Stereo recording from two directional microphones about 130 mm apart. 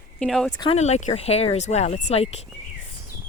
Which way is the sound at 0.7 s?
60° left (ahead or behind).